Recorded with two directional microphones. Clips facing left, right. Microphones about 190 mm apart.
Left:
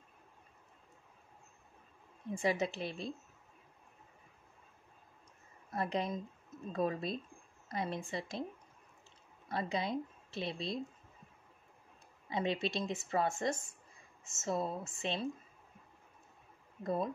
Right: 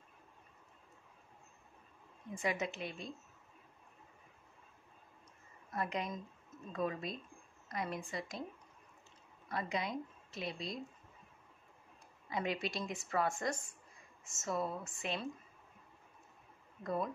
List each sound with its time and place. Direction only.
2.3 s a woman's voice: 30° left (ahead or behind)
5.7 s a woman's voice: 30° left (ahead or behind)
9.5 s a woman's voice: 30° left (ahead or behind)
12.3 s a woman's voice: 25° left (ahead or behind)
16.8 s a woman's voice: 25° left (ahead or behind)